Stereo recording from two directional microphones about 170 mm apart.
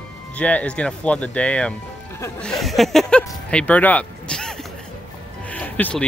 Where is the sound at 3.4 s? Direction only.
5° left (ahead or behind).